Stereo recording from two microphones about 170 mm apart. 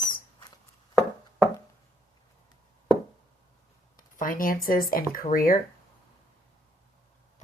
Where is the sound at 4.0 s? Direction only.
55° left (ahead or behind).